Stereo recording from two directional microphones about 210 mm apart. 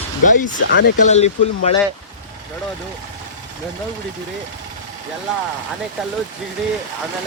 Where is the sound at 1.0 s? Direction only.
30° left (ahead or behind).